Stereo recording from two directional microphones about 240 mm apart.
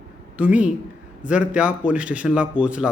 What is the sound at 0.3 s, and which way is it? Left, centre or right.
A man's voice, centre.